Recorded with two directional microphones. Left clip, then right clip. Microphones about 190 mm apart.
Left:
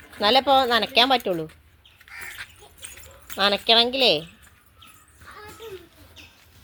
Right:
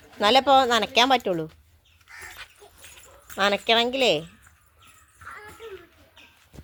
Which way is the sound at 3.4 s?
5° right (ahead or behind).